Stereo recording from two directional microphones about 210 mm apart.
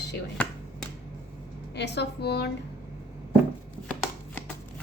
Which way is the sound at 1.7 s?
55° left (ahead or behind).